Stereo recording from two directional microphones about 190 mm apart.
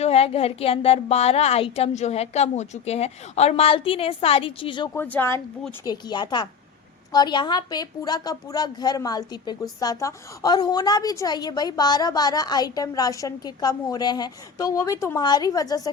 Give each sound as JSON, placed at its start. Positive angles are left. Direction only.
{"t": 0.0, "sound": "a woman's voice", "side_deg": 30}
{"t": 4.9, "sound": "a woman's voice", "side_deg": 10}